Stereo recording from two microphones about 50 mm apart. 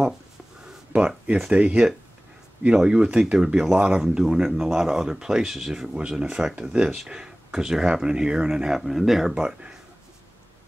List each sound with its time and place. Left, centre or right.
0.9 s speech: right
2.7 s speech: centre
3.5 s speech: centre
5.9 s speech: centre